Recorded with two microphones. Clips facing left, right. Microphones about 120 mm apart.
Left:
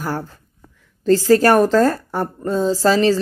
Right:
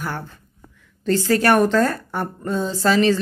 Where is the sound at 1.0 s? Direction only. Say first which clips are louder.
Left 5 dB; 35° left (ahead or behind).